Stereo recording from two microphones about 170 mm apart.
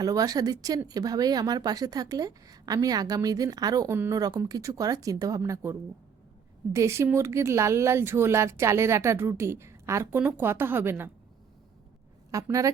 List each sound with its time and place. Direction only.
0.0 s speech: 20° right (ahead or behind)
6.7 s speech: 15° right (ahead or behind)
12.3 s speech: 20° right (ahead or behind)